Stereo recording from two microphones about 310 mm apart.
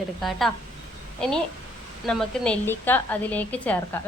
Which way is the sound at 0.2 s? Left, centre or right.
Centre.